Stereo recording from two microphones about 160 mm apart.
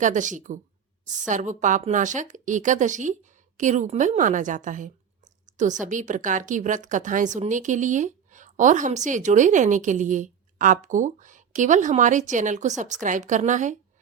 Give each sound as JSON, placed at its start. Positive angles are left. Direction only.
{"t": 0.0, "sound": "a woman's voice", "side_deg": -50}